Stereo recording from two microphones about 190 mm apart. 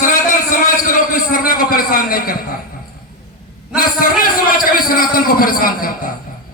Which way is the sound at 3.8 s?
50° left (ahead or behind).